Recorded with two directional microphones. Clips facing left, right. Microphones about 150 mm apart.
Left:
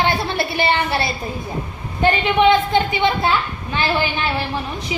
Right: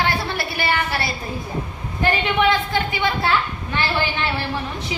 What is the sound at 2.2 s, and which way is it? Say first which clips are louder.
A woman's voice: left 6 dB; 20° left (ahead or behind).